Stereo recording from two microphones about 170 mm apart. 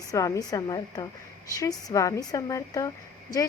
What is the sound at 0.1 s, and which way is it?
Speech, 20° left (ahead or behind).